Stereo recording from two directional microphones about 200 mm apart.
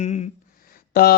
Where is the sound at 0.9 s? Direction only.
50° left (ahead or behind).